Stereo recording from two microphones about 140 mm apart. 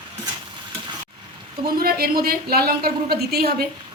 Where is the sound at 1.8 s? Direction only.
90° right.